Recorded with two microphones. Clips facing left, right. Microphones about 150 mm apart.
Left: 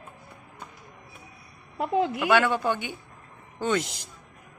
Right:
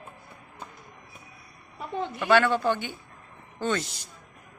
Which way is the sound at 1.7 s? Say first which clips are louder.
Left 7 dB; 90° left.